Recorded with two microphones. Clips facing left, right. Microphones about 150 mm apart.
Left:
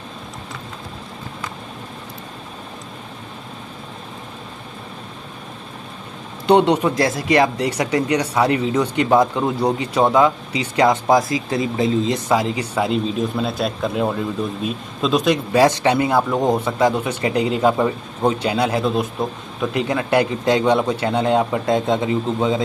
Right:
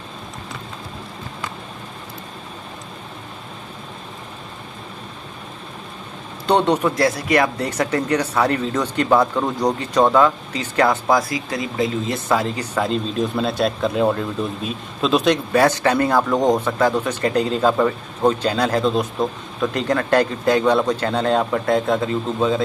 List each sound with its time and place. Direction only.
6.4 s speech: 10° left (ahead or behind)
12.3 s speech: 10° left (ahead or behind)
13.2 s speech: centre (ahead or behind)
15.5 s speech: 15° left (ahead or behind)